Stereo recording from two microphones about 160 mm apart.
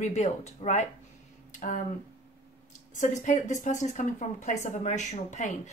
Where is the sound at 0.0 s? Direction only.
45° left (ahead or behind).